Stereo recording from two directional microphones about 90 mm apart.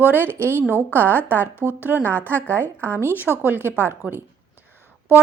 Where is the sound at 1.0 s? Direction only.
20° left (ahead or behind).